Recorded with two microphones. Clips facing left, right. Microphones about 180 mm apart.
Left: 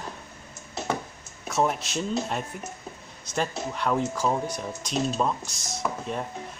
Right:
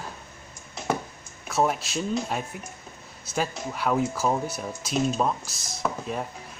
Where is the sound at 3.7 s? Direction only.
5° right (ahead or behind).